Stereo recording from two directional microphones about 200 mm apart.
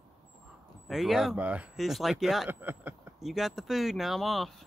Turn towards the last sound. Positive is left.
turn(degrees=0)  # may be behind; listen again after turning